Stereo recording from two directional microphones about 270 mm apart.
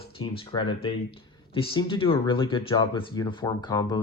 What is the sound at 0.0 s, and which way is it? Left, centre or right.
Speech, centre.